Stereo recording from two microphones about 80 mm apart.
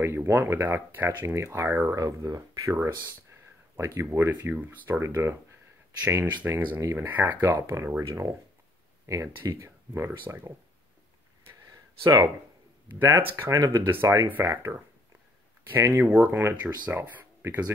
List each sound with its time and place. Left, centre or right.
0.0 s speech: right
2.0 s speech: right
6.3 s speech: right
7.6 s speech: right
12.0 s speech: right
13.0 s speech: right
15.7 s speech: right
16.0 s speech: right
16.6 s speech: centre